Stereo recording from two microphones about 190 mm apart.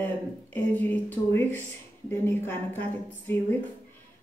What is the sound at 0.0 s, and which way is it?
A woman's voice, 10° left (ahead or behind).